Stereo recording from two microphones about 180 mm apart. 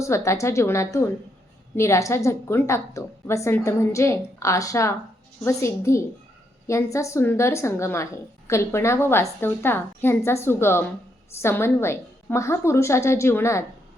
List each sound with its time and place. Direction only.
0.0 s a woman's voice: 15° left (ahead or behind)